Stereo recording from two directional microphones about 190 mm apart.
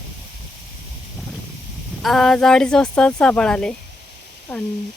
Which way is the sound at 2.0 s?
Centre (ahead or behind).